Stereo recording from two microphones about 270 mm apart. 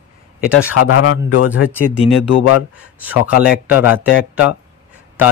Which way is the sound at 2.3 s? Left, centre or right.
Left.